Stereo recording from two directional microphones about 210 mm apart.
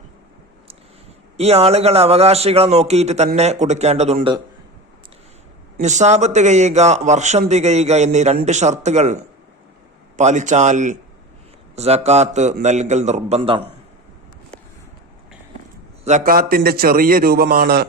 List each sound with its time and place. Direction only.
1.4 s a man's voice: 30° right (ahead or behind)
5.8 s speech: 35° right (ahead or behind)
16.0 s a man's voice: 40° right (ahead or behind)